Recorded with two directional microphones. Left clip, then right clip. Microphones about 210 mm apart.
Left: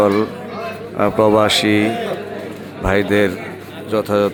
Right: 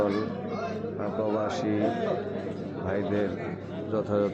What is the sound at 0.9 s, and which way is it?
Speech, 30° left (ahead or behind).